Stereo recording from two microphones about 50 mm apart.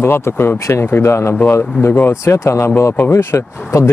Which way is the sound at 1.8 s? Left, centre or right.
Left.